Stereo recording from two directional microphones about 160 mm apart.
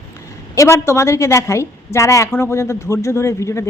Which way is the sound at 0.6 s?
15° left (ahead or behind).